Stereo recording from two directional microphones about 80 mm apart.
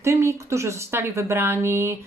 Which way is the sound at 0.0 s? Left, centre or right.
Right.